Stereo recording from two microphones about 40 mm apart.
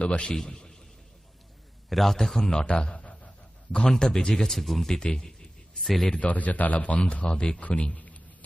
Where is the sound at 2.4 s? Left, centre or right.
Centre.